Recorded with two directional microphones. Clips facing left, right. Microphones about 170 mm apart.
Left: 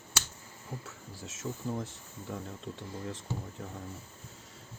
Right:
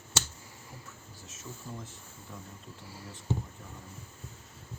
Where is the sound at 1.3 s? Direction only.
90° left.